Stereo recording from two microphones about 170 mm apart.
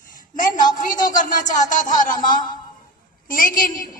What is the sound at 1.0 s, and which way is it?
A woman's voice, 50° left (ahead or behind).